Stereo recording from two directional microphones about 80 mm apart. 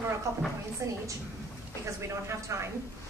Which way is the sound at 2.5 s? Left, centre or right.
Right.